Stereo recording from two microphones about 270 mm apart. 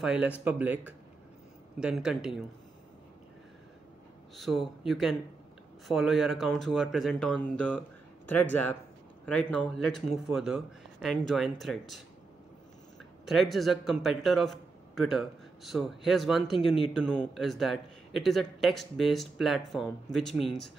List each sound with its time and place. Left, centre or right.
0.0 s a man's voice: centre
4.4 s a man's voice: centre
13.2 s a man's voice: centre